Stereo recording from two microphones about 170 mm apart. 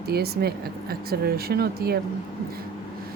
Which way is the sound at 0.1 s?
65° right (ahead or behind).